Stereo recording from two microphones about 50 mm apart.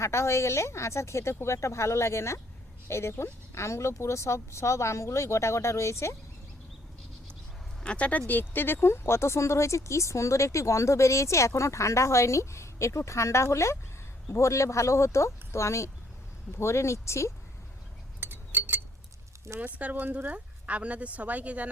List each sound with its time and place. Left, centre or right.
0.0 s speech: left
7.9 s speech: left
8.3 s speech: left
18.2 s chink: right
19.5 s speech: right
20.3 s speech: right